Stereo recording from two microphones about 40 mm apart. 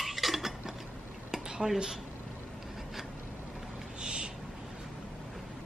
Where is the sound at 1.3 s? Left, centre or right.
Centre.